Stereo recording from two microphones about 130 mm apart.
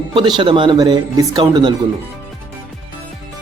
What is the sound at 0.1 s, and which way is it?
Speech, 35° right (ahead or behind).